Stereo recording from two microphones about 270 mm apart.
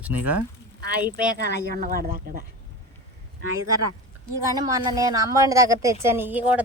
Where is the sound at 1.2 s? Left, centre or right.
Right.